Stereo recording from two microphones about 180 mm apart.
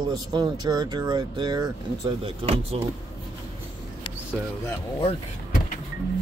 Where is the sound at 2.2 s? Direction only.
35° right (ahead or behind).